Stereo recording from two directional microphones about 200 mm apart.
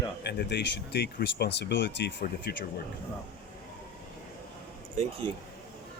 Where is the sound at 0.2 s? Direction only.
55° left (ahead or behind).